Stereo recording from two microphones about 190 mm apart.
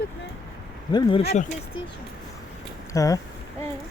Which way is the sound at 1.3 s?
35° left (ahead or behind).